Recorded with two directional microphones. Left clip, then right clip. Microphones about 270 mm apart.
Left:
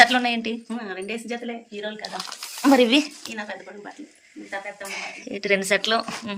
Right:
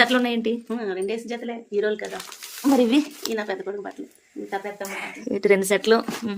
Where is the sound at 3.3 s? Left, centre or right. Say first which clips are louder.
Right 7 dB; right.